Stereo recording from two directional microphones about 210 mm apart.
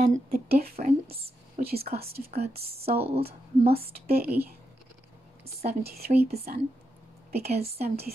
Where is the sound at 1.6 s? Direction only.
40° right (ahead or behind).